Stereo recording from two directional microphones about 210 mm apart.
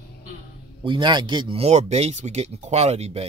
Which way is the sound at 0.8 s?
20° right (ahead or behind).